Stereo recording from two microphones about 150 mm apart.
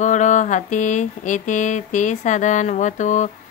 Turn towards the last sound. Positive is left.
turn(degrees=55)  # may be behind; listen again after turning